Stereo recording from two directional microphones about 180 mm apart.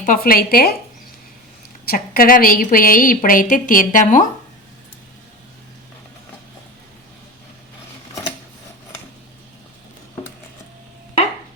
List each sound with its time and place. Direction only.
0.0 s speech: 50° left (ahead or behind)
1.8 s a woman's voice: 55° left (ahead or behind)